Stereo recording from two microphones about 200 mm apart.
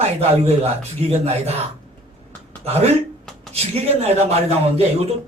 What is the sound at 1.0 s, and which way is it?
Speech, 30° right (ahead or behind).